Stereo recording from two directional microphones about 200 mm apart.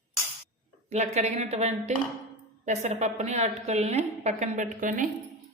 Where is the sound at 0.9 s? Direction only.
35° right (ahead or behind).